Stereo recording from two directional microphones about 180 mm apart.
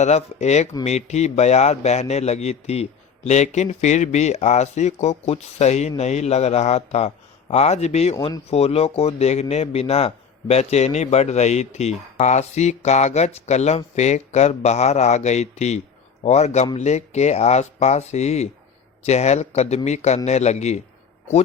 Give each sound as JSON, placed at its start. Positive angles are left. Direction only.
{"t": 0.0, "sound": "speech", "side_deg": 40}